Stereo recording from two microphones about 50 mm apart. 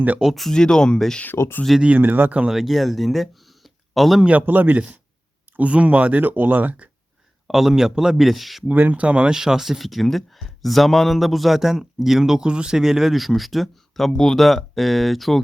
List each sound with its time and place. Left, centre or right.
0.2 s speech: centre
0.5 s speech: centre
2.0 s speech: right
2.5 s speech: centre
4.3 s speech: right
5.5 s speech: right
7.4 s speech: centre
8.6 s speech: right
9.3 s speech: centre